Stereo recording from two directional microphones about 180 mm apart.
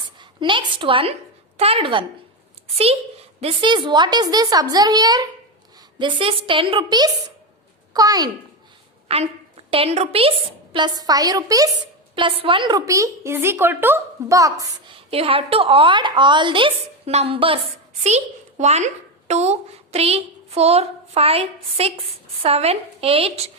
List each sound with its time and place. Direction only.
0.2 s a woman's voice: 25° right (ahead or behind)
9.0 s a woman's voice: 35° right (ahead or behind); by 14.9 s 20° right (ahead or behind)
14.9 s a woman's voice: 30° right (ahead or behind)